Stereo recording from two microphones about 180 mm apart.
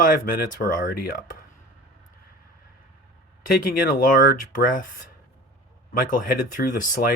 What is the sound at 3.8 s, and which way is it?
A man's voice, 55° left (ahead or behind).